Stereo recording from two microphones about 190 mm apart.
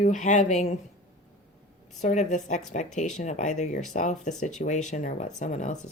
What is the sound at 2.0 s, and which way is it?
Speech, 40° left (ahead or behind).